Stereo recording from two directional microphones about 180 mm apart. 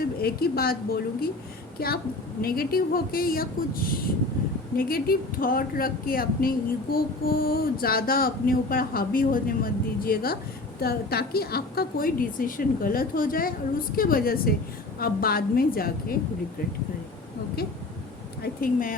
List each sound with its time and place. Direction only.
0.0 s speech: 60° left (ahead or behind)
18.4 s speech: 50° left (ahead or behind)